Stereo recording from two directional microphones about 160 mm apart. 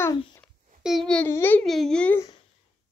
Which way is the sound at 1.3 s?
10° left (ahead or behind).